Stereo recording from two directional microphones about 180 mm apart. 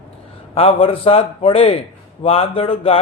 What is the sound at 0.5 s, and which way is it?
A man's voice, 30° left (ahead or behind).